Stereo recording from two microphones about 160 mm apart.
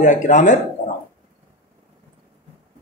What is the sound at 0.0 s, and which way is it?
Speech, 50° left (ahead or behind).